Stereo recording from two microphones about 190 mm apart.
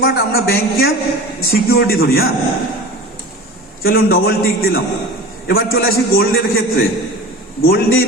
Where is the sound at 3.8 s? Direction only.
50° left (ahead or behind).